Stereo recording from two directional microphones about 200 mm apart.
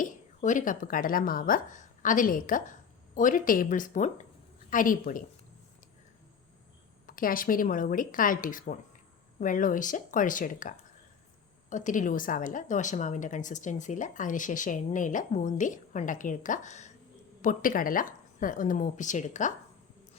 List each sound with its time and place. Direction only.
0.0 s a woman's voice: 40° left (ahead or behind)
7.1 s a woman's voice: 45° left (ahead or behind)